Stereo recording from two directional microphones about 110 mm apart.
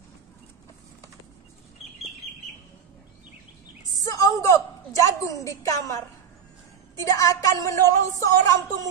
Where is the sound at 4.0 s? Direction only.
30° left (ahead or behind).